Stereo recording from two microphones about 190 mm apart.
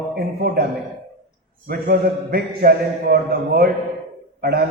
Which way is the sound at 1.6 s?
50° right (ahead or behind).